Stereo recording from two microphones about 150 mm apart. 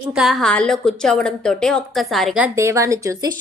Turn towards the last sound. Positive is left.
turn(degrees=-20)  # may be behind; listen again after turning